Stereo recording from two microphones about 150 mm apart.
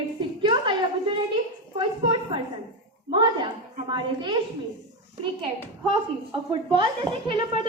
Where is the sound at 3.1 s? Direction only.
30° right (ahead or behind).